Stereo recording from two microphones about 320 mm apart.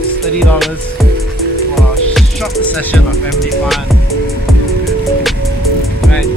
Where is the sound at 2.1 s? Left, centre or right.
Centre.